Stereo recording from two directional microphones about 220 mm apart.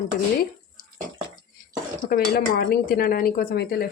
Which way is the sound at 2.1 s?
45° left (ahead or behind).